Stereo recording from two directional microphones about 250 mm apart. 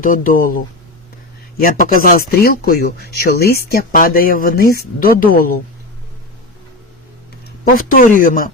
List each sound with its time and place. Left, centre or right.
0.0 s speech: left
7.8 s speech: left